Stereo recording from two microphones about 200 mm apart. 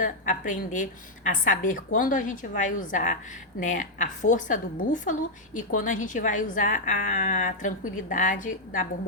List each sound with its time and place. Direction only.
0.0 s a woman's voice: 40° left (ahead or behind)